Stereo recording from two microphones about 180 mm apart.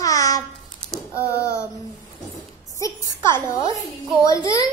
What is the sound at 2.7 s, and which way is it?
A woman's voice, 15° left (ahead or behind).